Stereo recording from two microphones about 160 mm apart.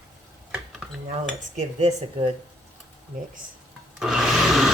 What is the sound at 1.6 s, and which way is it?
Speech, 45° right (ahead or behind).